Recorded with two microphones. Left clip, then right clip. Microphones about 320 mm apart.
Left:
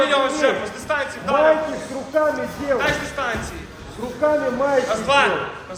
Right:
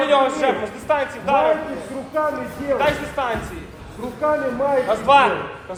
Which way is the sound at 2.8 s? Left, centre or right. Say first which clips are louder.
Right 2 dB; right.